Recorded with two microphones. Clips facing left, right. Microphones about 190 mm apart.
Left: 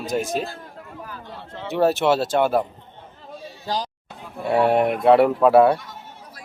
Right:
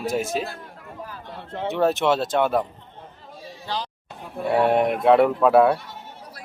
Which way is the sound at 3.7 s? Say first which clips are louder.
Left 3 dB; 40° left (ahead or behind).